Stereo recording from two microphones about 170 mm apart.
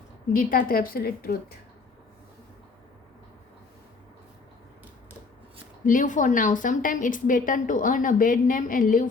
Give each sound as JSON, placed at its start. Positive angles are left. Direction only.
{"t": 0.3, "sound": "a woman's voice", "side_deg": 55}
{"t": 5.8, "sound": "a woman's voice", "side_deg": 50}